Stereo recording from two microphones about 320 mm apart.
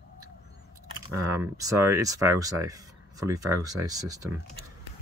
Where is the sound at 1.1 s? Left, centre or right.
Centre.